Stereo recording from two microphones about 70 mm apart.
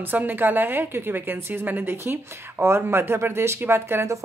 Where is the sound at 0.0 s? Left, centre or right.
Right.